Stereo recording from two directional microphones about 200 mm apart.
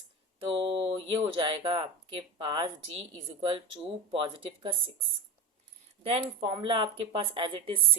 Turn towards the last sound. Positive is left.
turn(degrees=-25)  # may be behind; listen again after turning